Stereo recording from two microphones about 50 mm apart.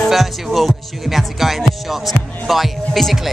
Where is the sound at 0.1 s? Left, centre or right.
Centre.